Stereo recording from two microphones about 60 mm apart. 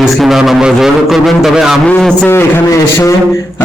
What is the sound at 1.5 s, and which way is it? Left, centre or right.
Music, centre.